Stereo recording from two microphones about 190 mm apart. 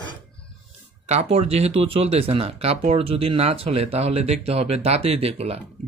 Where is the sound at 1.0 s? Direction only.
35° right (ahead or behind).